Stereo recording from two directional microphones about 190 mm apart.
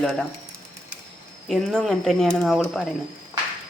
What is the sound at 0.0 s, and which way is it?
Speech, centre (ahead or behind).